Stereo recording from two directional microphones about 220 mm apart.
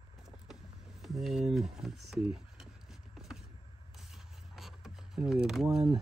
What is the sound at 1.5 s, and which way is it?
Speech, centre (ahead or behind).